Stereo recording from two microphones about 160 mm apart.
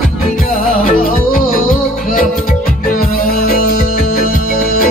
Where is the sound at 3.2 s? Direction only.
65° left (ahead or behind).